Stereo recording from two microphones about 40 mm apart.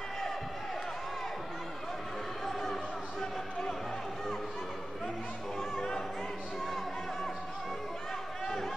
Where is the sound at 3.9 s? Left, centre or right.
Centre.